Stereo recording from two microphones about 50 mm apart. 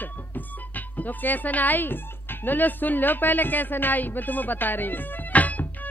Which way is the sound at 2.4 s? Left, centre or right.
Left.